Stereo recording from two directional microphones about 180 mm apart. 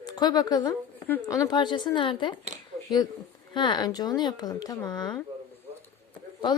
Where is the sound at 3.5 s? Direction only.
25° left (ahead or behind).